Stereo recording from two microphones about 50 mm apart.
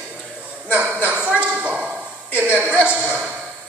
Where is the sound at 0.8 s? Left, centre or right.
Right.